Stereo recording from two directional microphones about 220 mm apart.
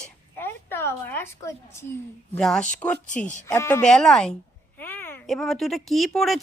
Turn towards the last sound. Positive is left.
turn(degrees=0)  # may be behind; listen again after turning